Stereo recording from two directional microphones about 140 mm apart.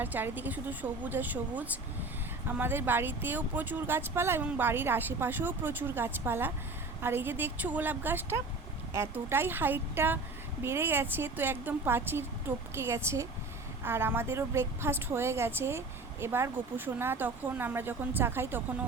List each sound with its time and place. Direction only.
0.0 s speech: 15° right (ahead or behind)